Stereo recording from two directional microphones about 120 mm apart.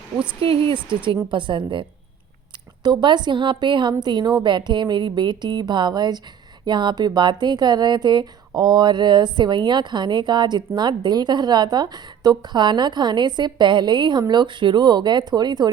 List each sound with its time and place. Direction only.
0.4 s a woman's voice: 50° right (ahead or behind)
2.8 s a woman's voice: 40° right (ahead or behind)